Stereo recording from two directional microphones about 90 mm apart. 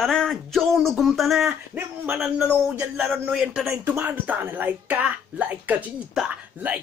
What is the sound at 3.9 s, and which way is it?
Speech, 20° right (ahead or behind).